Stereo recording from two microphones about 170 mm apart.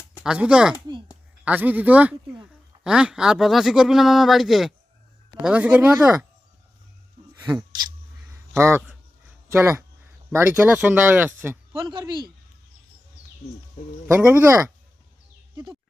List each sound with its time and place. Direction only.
0.2 s speech: 5° right (ahead or behind)
7.3 s a sound: 10° right (ahead or behind)
9.5 s speech: 15° right (ahead or behind)
11.7 s speech: 30° right (ahead or behind)
14.1 s speech: 10° right (ahead or behind)
15.5 s bird: 20° right (ahead or behind)